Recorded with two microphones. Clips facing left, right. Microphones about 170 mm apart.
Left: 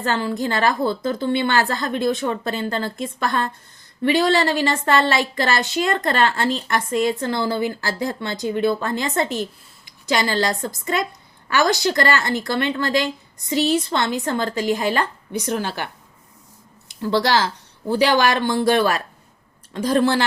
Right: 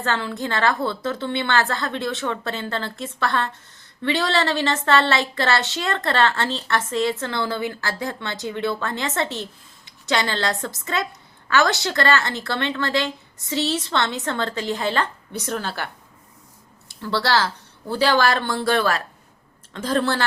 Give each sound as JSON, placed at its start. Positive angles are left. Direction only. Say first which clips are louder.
{"t": 0.0, "sound": "a woman's voice", "louder": "left 3 dB", "side_deg": 15}
{"t": 16.9, "sound": "a woman's voice", "louder": "left 3 dB", "side_deg": 15}